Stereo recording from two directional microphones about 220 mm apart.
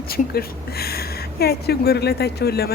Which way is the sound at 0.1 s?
45° left (ahead or behind).